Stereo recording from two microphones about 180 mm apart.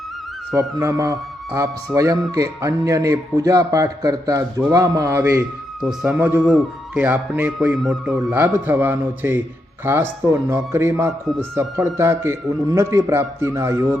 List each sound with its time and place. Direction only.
0.8 s a man's voice: 15° right (ahead or behind)
5.8 s speech: centre (ahead or behind)